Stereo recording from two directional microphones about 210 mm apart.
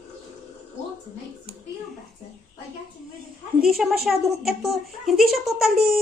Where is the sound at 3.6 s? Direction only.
Centre (ahead or behind).